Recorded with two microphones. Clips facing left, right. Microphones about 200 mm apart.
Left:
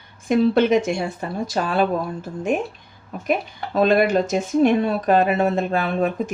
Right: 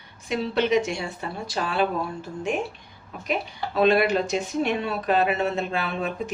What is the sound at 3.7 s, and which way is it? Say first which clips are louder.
Speech: left 3 dB; 45° left (ahead or behind).